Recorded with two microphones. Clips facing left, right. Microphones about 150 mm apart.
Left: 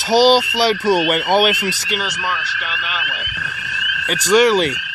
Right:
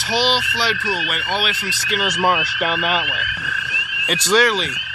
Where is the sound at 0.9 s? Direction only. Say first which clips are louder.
Left 9 dB; 55° left (ahead or behind).